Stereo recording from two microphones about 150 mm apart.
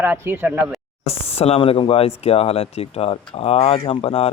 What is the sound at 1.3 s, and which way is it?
Speech, 40° left (ahead or behind).